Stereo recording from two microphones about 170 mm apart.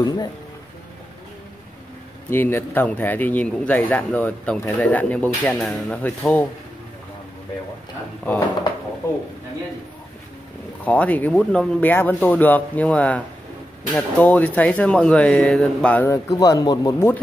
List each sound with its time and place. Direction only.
0.0 s speech: 25° left (ahead or behind)
2.2 s a man's voice: 15° left (ahead or behind)
10.8 s a man's voice: 10° left (ahead or behind); by 17.1 s 25° left (ahead or behind)